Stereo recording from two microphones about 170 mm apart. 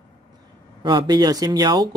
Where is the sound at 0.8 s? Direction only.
25° right (ahead or behind).